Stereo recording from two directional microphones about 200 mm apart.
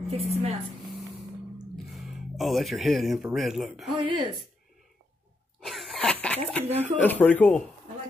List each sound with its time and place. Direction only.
0.1 s a woman's voice: 30° right (ahead or behind)
1.9 s speech: centre (ahead or behind)
5.6 s cough: centre (ahead or behind)
6.2 s speech: 5° left (ahead or behind)